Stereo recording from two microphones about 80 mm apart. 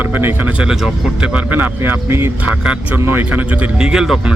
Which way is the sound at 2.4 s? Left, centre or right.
Centre.